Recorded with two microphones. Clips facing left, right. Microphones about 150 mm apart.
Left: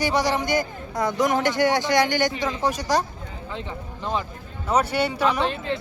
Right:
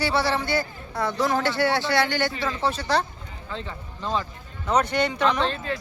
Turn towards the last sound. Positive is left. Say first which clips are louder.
# left 1 dB
turn(degrees=10)  # may be behind; listen again after turning